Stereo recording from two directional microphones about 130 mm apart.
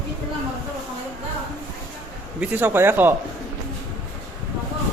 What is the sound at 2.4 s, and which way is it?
Speech, 15° right (ahead or behind).